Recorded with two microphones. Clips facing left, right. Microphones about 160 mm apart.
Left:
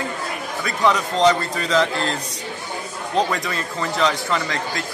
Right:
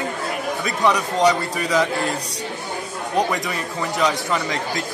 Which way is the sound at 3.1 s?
15° right (ahead or behind).